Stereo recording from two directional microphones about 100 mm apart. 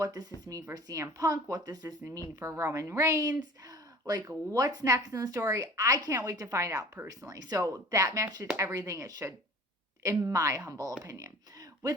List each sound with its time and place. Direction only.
0.0 s a woman's voice: 40° right (ahead or behind)